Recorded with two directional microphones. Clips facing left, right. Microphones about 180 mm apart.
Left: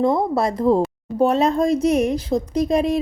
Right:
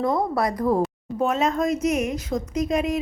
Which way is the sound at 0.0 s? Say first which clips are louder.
Left 4 dB; 25° left (ahead or behind).